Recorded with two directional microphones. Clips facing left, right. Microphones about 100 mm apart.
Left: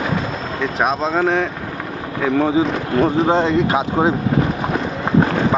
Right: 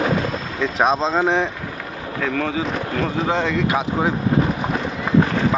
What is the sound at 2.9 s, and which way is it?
Speech, 25° left (ahead or behind).